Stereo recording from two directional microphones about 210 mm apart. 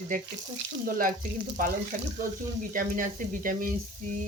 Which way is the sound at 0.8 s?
40° right (ahead or behind).